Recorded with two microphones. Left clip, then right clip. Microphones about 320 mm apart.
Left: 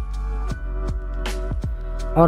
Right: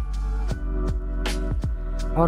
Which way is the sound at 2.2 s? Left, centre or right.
Centre.